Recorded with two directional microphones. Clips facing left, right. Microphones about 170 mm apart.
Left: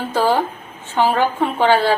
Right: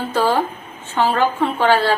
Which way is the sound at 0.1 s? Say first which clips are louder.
Left 1 dB; 15° left (ahead or behind).